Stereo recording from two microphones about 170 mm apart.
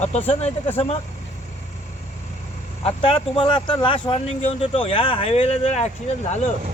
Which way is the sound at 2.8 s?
30° left (ahead or behind).